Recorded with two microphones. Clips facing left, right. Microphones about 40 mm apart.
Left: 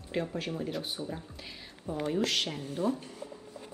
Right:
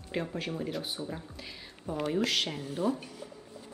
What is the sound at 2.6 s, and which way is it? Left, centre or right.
Speech, right.